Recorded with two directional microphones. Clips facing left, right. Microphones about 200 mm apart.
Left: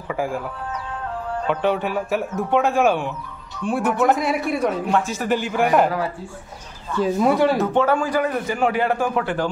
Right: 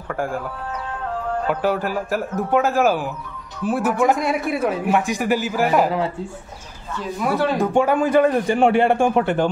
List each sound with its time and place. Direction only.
0.1 s a man's voice: centre (ahead or behind)
1.5 s a man's voice: 5° right (ahead or behind)
7.2 s speech: 20° left (ahead or behind)
7.5 s a man's voice: 10° right (ahead or behind)